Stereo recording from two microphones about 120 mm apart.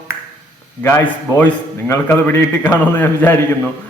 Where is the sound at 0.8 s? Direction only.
15° left (ahead or behind).